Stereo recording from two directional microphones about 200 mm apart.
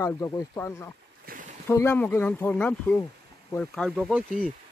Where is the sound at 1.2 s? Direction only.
45° right (ahead or behind).